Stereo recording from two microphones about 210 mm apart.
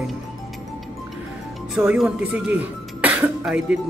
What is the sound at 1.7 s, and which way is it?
Speech, centre (ahead or behind).